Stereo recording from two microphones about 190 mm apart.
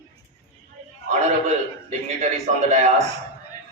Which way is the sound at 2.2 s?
35° right (ahead or behind).